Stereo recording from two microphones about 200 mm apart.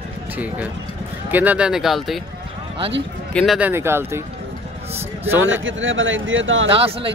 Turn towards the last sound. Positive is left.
turn(degrees=-25)  # may be behind; listen again after turning